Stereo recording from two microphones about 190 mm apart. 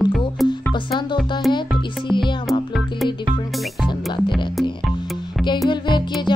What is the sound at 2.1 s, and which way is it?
Music, 25° left (ahead or behind).